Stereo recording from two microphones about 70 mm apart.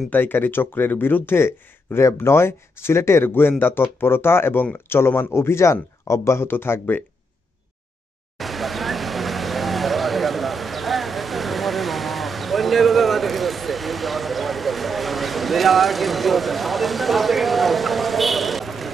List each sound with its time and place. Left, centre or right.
0.1 s speech: left
8.4 s vehicle: centre